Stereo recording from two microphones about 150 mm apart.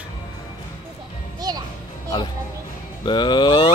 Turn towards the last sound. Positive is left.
turn(degrees=30)  # may be behind; listen again after turning